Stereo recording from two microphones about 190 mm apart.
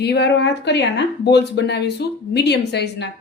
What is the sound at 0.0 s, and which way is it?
A woman's voice, 60° left (ahead or behind).